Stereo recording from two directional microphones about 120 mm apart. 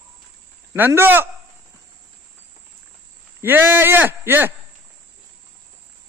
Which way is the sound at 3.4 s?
20° right (ahead or behind).